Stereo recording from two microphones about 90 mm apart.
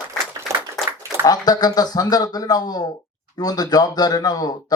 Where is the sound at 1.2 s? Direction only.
45° left (ahead or behind).